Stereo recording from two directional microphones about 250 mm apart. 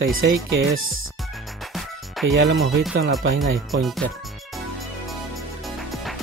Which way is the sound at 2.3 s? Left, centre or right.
Right.